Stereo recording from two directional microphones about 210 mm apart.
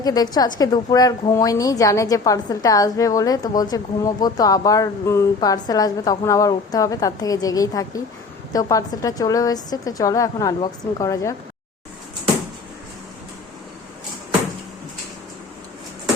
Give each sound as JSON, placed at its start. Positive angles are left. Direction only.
{"t": 0.0, "sound": "a woman's voice", "side_deg": 20}